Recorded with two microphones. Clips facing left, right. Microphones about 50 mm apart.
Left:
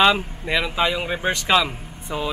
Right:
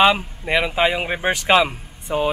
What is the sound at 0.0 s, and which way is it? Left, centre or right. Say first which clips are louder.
A man's voice: right 1 dB; centre.